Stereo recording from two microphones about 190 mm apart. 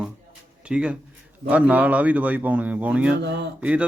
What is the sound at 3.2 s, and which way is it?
Speech, 65° right (ahead or behind).